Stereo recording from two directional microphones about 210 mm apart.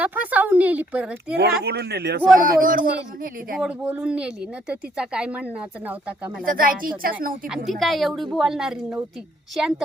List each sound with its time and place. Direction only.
0.0 s a woman's voice: 5° right (ahead or behind)
1.6 s a man's voice: 50° right (ahead or behind)
3.6 s speech: 5° right (ahead or behind)
6.4 s a man's voice: 40° right (ahead or behind)
7.4 s speech: centre (ahead or behind)